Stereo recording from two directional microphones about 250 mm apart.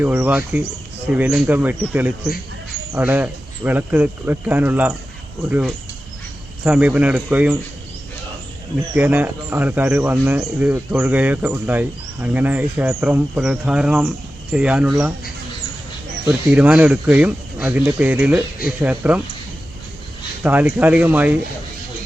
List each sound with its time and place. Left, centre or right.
0.0 s speech: centre
9.0 s speech: centre
16.2 s speech: centre
20.4 s speech: centre